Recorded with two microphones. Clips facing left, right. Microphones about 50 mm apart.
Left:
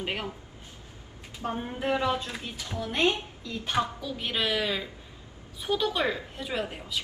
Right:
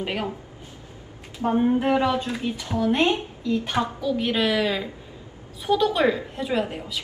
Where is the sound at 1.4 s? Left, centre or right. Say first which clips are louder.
Right 11 dB; right.